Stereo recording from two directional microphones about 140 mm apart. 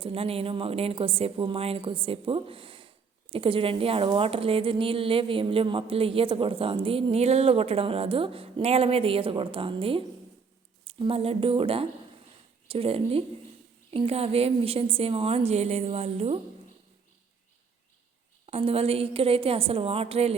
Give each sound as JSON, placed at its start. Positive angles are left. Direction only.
{"t": 0.0, "sound": "a woman's voice", "side_deg": -40}
{"t": 18.4, "sound": "a woman's voice", "side_deg": -45}